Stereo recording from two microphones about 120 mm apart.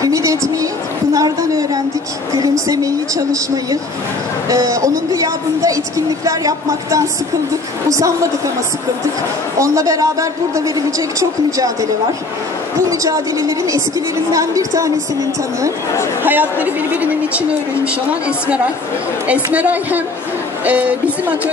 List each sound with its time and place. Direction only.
0.0 s speech: 25° right (ahead or behind)
9.6 s speech: 25° right (ahead or behind)
16.3 s a man's voice: 15° right (ahead or behind)
19.2 s a man's voice: 10° right (ahead or behind)